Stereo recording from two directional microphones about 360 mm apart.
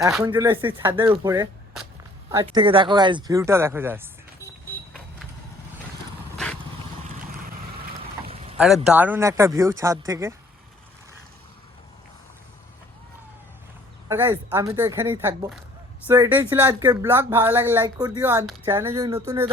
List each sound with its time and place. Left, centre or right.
0.0 s speech: centre
6.3 s vehicle: centre
7.4 s vehicle: centre
8.5 s speech: centre
14.1 s speech: centre